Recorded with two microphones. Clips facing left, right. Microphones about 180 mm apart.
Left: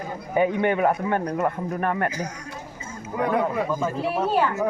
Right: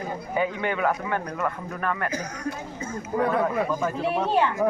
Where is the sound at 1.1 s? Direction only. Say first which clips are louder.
Left 4 dB; 40° left (ahead or behind).